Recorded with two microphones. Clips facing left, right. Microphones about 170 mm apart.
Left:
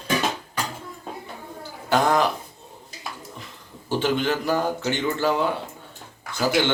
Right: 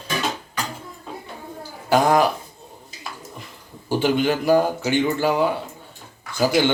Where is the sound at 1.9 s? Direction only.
10° right (ahead or behind).